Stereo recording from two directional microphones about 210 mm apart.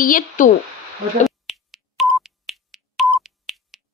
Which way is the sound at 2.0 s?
Centre (ahead or behind).